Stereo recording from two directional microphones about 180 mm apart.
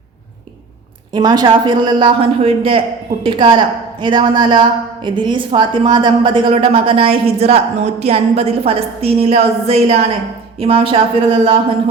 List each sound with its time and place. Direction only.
1.1 s a woman's voice: 20° right (ahead or behind)